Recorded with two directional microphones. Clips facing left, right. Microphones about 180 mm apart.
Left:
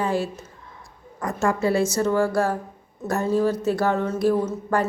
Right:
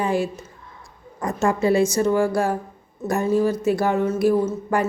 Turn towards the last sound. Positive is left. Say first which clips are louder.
# right 2 dB
turn(degrees=-10)  # may be behind; listen again after turning